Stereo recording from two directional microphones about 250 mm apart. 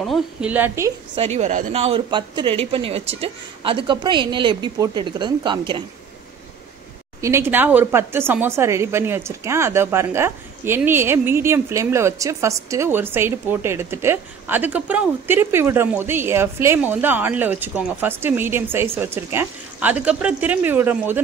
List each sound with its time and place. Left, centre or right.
0.0 s a woman's voice: centre
1.1 s speech: right
7.2 s a woman's voice: centre